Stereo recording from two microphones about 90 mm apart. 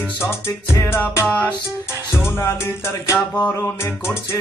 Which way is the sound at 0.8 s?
30° left (ahead or behind).